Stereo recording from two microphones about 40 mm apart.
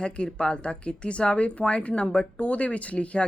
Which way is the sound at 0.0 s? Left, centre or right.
Left.